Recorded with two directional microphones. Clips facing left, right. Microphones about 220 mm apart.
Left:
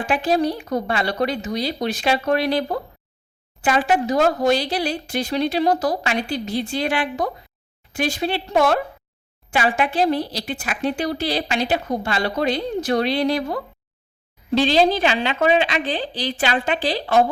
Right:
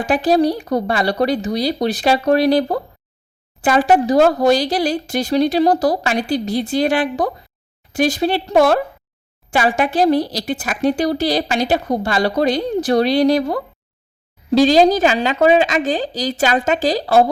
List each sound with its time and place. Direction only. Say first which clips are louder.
0.0 s speech: right 5 dB; 40° right (ahead or behind)